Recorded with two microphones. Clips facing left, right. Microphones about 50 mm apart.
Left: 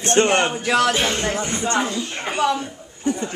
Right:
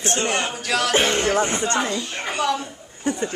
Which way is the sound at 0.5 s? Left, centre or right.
Left.